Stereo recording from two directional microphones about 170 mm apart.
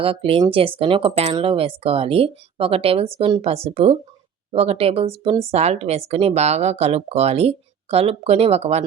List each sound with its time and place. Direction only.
0.0 s speech: 35° right (ahead or behind)